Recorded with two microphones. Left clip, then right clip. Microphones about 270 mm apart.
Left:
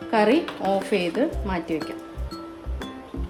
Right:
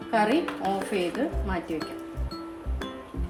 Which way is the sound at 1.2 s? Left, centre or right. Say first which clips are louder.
Left 5 dB; left.